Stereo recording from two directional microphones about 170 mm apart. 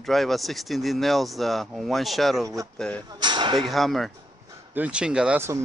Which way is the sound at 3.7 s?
Centre (ahead or behind).